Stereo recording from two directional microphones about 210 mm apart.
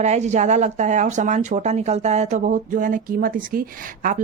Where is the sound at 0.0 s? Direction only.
35° right (ahead or behind).